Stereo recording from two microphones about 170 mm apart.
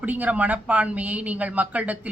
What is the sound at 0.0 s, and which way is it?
Speech, 10° right (ahead or behind).